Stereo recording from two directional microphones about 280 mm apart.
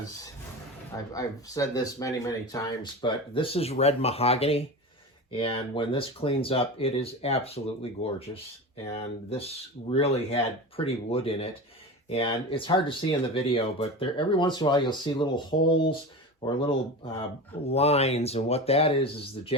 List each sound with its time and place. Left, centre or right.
0.9 s speech: centre
17.7 s speech: left